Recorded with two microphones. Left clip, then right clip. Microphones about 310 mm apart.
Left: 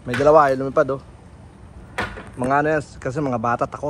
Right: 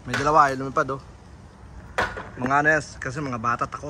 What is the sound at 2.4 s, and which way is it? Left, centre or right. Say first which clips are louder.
Speech: left 1 dB; centre.